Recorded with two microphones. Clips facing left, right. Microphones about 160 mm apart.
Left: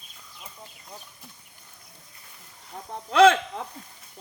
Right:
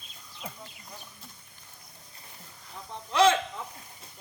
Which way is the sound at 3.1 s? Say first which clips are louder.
Left 6 dB; 60° left (ahead or behind).